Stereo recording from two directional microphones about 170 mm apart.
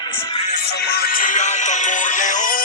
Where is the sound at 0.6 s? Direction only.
70° left (ahead or behind).